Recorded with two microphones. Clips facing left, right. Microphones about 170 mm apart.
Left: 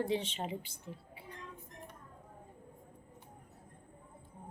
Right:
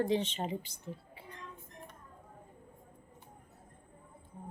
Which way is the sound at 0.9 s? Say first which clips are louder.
Right 4 dB; 45° right (ahead or behind).